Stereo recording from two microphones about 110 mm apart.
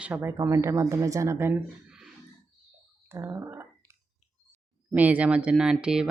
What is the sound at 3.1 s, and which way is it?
Speech, 25° right (ahead or behind).